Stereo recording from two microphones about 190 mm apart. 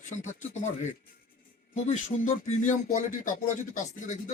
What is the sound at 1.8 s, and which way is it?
Speech, 35° left (ahead or behind).